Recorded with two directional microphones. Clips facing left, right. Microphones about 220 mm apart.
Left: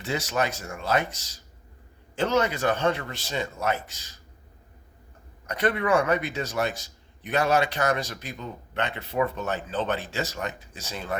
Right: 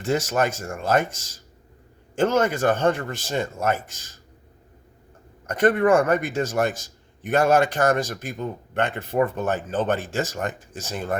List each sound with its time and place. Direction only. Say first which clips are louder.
0.0 s a man's voice: right 5 dB; 45° right (ahead or behind)
5.5 s a man's voice: right 6 dB; 50° right (ahead or behind)